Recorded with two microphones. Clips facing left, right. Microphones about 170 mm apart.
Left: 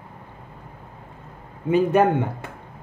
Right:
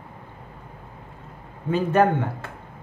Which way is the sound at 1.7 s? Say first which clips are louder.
Left 2 dB; 15° left (ahead or behind).